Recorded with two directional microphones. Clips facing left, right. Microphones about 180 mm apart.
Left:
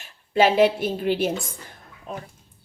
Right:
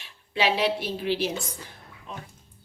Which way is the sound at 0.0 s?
45° left (ahead or behind).